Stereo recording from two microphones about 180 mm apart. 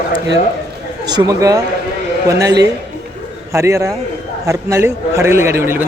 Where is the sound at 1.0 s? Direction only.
20° right (ahead or behind).